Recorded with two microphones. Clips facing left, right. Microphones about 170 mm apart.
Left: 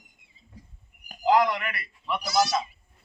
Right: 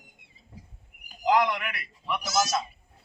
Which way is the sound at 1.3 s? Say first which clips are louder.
Left 2 dB; centre (ahead or behind).